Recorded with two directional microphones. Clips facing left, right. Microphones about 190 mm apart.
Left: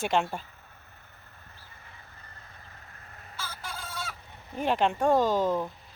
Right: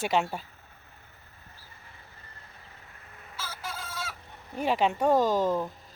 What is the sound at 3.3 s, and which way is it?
Chicken, 5° right (ahead or behind).